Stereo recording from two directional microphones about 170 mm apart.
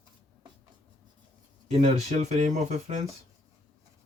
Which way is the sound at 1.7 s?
45° right (ahead or behind).